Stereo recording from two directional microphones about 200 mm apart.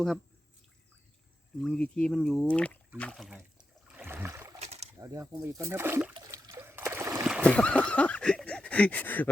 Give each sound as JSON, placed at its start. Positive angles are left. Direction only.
{"t": 1.6, "sound": "speech", "side_deg": 5}
{"t": 3.9, "sound": "boat", "side_deg": -10}
{"t": 4.6, "sound": "a sound", "side_deg": -35}
{"t": 4.9, "sound": "speech", "side_deg": -15}
{"t": 6.1, "sound": "trickle", "side_deg": -15}
{"t": 7.4, "sound": "speech", "side_deg": 5}